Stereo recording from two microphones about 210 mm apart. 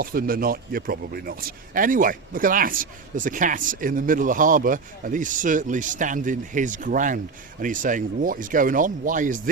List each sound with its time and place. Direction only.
0.0 s a man's voice: 45° right (ahead or behind)